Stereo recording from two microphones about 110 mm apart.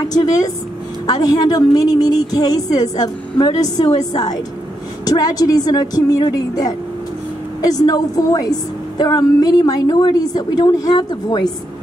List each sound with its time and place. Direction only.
0.1 s a woman's voice: 35° left (ahead or behind)